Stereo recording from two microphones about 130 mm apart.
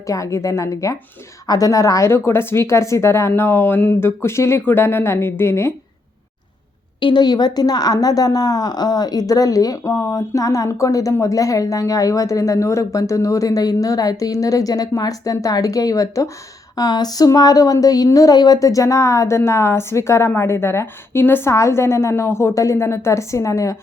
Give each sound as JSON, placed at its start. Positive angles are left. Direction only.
{"t": 0.1, "sound": "a woman's voice", "side_deg": 25}
{"t": 7.0, "sound": "a woman's voice", "side_deg": 35}